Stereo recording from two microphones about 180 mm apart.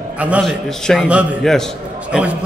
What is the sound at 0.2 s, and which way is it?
A man's voice, 5° right (ahead or behind).